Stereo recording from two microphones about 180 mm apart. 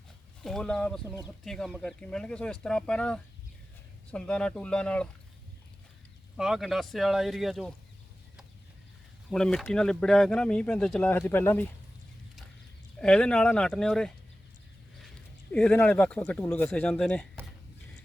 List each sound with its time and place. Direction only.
0.4 s speech: 5° left (ahead or behind)
1.0 s speech: 20° left (ahead or behind)
1.5 s speech: centre (ahead or behind)
6.3 s speech: centre (ahead or behind)
9.3 s speech: 5° left (ahead or behind)
13.0 s speech: 5° left (ahead or behind)
15.5 s speech: 10° left (ahead or behind)